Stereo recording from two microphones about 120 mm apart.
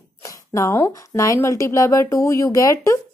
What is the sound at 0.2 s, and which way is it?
Speech, 25° left (ahead or behind).